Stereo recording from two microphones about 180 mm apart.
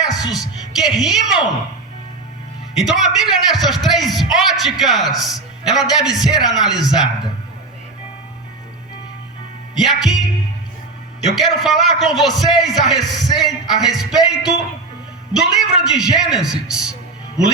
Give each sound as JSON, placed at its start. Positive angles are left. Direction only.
{"t": 0.1, "sound": "music", "side_deg": 20}
{"t": 0.8, "sound": "a man's voice", "side_deg": 0}
{"t": 2.7, "sound": "a man's voice", "side_deg": 0}
{"t": 9.7, "sound": "a man's voice", "side_deg": 0}
{"t": 11.6, "sound": "a man's voice", "side_deg": 0}